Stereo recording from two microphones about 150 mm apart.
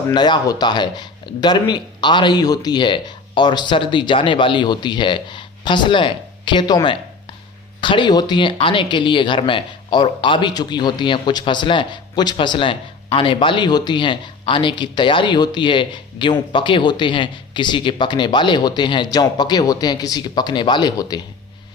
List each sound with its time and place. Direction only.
0.1 s speech: 30° left (ahead or behind)